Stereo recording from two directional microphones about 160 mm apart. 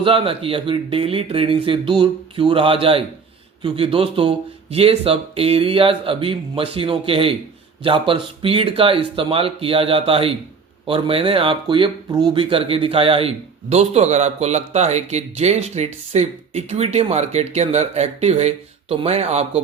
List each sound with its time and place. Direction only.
0.0 s speech: 35° right (ahead or behind)